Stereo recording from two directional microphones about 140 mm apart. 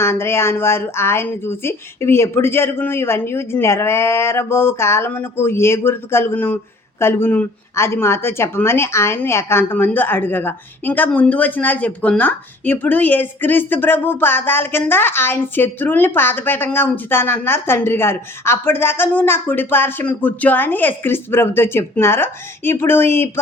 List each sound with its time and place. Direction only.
0.0 s speech: 15° left (ahead or behind)